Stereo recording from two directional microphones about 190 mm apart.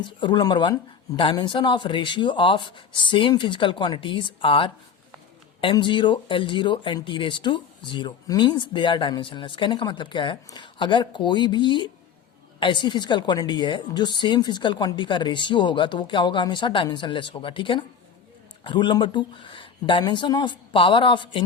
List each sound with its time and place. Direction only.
0.0 s speech: 25° left (ahead or behind)